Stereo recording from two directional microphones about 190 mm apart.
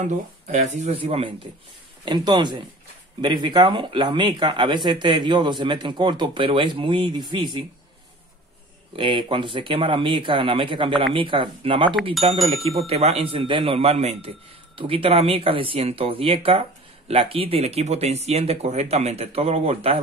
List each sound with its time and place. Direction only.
0.5 s speech: 40° right (ahead or behind); by 7.6 s 25° right (ahead or behind)
8.9 s speech: 25° right (ahead or behind)
11.9 s speech: centre (ahead or behind)
12.6 s speech: 30° right (ahead or behind)